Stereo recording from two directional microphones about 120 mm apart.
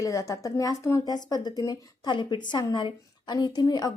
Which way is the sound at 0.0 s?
25° left (ahead or behind).